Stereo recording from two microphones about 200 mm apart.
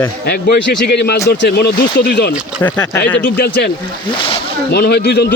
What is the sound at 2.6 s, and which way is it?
Speech, 15° left (ahead or behind).